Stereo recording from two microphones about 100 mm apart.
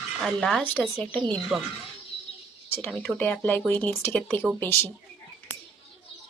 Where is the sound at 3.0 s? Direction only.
10° left (ahead or behind).